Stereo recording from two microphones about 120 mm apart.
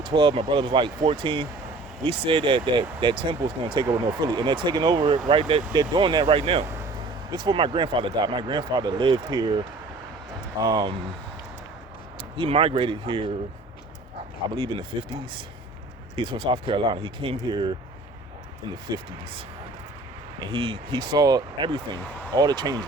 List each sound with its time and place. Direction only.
0.0 s speech: 40° right (ahead or behind)
3.8 s speech: 30° right (ahead or behind); by 6.7 s 45° right (ahead or behind)
7.3 s speech: 35° right (ahead or behind)
12.4 s speech: 50° right (ahead or behind)
14.5 s speech: 40° right (ahead or behind)
20.5 s speech: 45° right (ahead or behind)